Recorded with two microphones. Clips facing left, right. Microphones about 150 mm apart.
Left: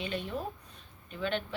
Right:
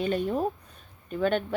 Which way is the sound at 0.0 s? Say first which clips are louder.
Right 9 dB; 45° right (ahead or behind).